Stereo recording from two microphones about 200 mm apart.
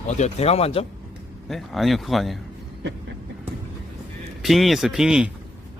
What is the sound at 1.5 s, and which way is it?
Speech, centre (ahead or behind).